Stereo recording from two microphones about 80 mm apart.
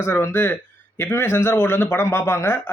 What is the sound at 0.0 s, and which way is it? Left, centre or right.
A man's voice, left.